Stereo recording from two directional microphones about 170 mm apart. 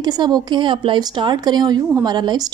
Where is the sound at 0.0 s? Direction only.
25° right (ahead or behind).